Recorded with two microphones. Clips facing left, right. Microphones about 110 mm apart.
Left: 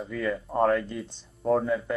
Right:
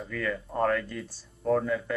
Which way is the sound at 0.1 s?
15° left (ahead or behind).